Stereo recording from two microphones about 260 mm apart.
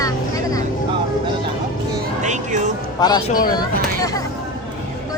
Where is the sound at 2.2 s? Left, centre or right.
Right.